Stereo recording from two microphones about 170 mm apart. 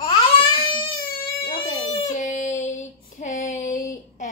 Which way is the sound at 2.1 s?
45° left (ahead or behind).